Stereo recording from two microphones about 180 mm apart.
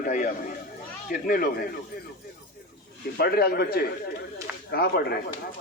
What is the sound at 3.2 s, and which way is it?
Speech, 60° left (ahead or behind).